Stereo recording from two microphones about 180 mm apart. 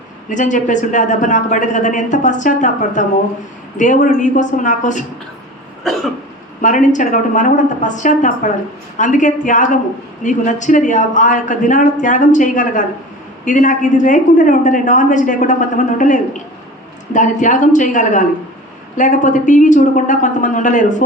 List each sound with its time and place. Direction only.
0.3 s a woman's voice: 45° left (ahead or behind)
6.6 s a woman's voice: 45° left (ahead or behind)